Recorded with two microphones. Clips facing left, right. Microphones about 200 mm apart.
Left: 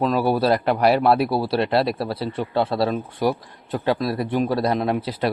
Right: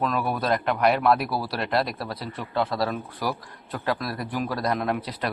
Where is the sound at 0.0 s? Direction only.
30° left (ahead or behind).